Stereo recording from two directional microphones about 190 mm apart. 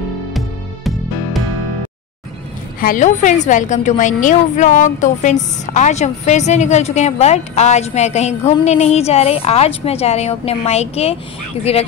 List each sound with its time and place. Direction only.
0.3 s music: centre (ahead or behind)
2.8 s a woman's voice: 45° left (ahead or behind)